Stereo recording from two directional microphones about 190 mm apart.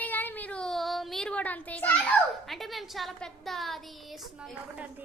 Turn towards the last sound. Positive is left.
turn(degrees=-5)  # may be behind; listen again after turning